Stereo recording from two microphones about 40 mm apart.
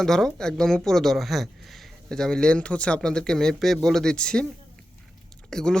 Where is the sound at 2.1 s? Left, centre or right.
Centre.